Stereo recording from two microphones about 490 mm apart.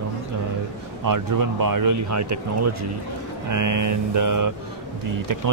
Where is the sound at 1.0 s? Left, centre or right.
Right.